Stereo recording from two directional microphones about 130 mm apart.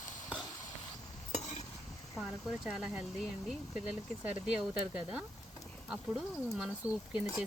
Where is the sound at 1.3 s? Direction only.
60° left (ahead or behind).